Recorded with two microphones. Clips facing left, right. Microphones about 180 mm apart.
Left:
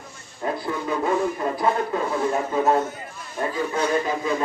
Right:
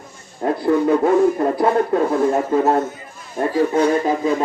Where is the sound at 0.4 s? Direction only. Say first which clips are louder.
Right 10 dB; 55° right (ahead or behind).